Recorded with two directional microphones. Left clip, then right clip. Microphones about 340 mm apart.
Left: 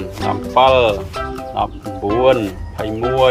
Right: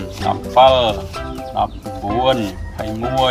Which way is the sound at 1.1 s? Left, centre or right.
Centre.